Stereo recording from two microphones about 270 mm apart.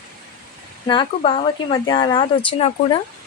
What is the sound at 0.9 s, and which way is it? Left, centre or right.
Speech, centre.